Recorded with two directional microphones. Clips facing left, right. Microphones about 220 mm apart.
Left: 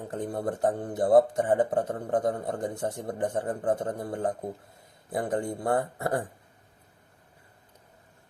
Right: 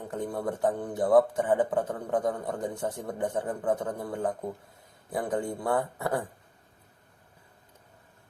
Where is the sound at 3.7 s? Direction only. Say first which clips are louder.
Left 1 dB; 45° left (ahead or behind).